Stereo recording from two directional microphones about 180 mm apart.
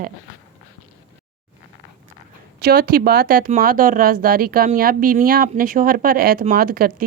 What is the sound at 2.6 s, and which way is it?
Speech, 55° right (ahead or behind).